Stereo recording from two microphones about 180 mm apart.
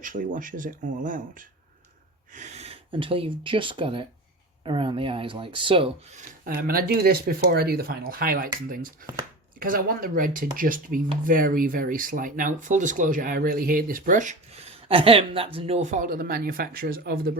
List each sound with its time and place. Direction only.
0.0 s speech: 45° right (ahead or behind); by 6.1 s 30° right (ahead or behind)
6.1 s speech: 50° right (ahead or behind)